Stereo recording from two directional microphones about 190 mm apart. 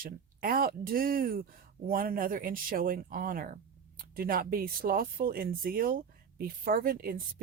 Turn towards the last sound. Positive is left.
turn(degrees=-50)  # may be behind; listen again after turning